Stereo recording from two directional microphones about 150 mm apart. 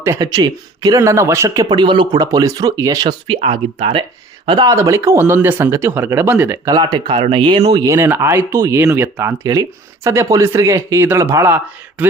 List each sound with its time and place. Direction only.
0.0 s speech: 20° right (ahead or behind); by 4.0 s 40° right (ahead or behind)
4.4 s speech: 30° right (ahead or behind)
6.7 s speech: 25° right (ahead or behind)
7.2 s speech: 35° right (ahead or behind); by 12.0 s 10° right (ahead or behind)